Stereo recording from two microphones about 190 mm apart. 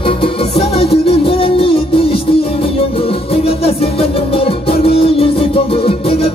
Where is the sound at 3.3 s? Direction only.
30° left (ahead or behind).